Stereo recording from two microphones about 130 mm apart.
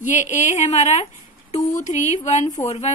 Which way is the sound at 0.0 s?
70° left (ahead or behind).